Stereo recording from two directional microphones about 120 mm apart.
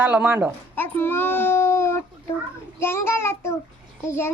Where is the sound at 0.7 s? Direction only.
15° left (ahead or behind).